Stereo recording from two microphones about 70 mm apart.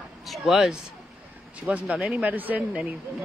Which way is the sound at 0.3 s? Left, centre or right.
Centre.